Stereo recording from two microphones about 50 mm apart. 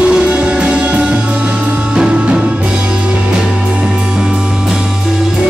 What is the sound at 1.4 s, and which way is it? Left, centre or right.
Music, right.